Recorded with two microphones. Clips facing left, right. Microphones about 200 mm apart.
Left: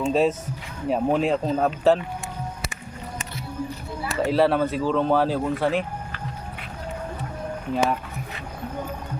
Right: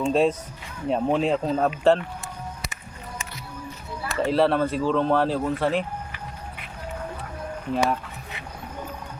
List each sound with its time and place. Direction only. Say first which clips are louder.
0.0 s speech: even; 5° left (ahead or behind)
4.1 s speech: left 1 dB; centre (ahead or behind)
7.7 s speech: even; centre (ahead or behind)